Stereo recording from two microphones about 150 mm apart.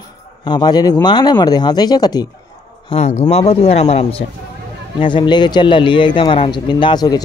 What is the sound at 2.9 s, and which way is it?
A man's voice, 45° left (ahead or behind).